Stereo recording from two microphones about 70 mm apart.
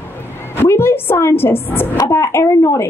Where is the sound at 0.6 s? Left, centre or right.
Left.